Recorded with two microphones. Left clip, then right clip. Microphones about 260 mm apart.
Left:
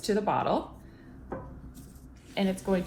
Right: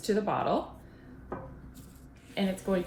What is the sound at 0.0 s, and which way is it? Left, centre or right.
Speech, centre.